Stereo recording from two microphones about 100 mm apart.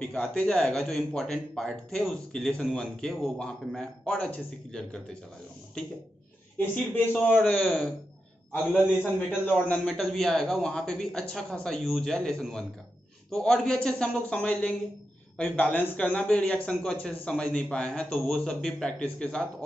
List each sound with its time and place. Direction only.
0.2 s a man's voice: 10° left (ahead or behind)
6.6 s a man's voice: 15° left (ahead or behind)
8.8 s a man's voice: 10° right (ahead or behind)
9.5 s a man's voice: 10° left (ahead or behind)